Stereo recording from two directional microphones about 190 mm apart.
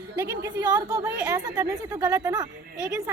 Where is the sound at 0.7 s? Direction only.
20° right (ahead or behind).